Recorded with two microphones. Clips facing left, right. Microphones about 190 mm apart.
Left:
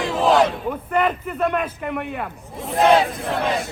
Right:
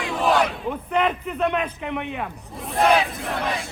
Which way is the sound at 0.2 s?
25° left (ahead or behind).